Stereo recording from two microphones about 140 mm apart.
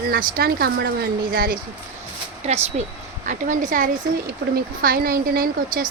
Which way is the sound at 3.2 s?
65° right (ahead or behind).